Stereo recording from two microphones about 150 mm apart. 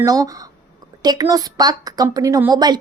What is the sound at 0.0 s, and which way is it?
Speech, 25° right (ahead or behind).